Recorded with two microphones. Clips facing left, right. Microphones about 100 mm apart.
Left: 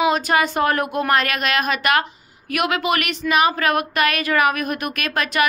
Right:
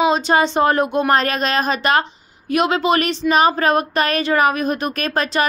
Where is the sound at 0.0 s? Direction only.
25° right (ahead or behind).